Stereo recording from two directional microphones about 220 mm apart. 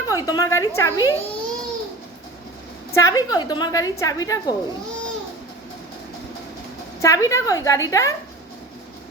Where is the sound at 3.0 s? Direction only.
15° left (ahead or behind).